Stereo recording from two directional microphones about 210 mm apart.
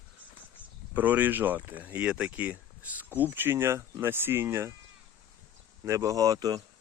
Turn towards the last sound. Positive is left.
turn(degrees=-20)  # may be behind; listen again after turning